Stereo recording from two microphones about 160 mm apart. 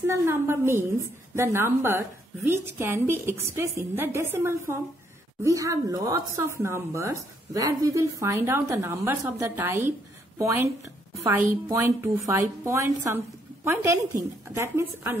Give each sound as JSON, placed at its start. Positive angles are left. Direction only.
{"t": 0.0, "sound": "a woman's voice", "side_deg": -15}
{"t": 14.5, "sound": "a woman's voice", "side_deg": -15}